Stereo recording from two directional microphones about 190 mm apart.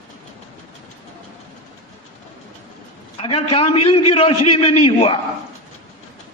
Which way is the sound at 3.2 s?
30° left (ahead or behind).